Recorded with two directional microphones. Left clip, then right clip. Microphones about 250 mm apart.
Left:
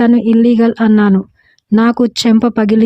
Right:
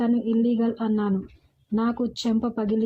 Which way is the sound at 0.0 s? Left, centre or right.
Left.